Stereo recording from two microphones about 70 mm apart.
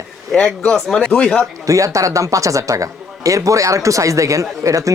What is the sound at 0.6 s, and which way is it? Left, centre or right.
Speech, centre.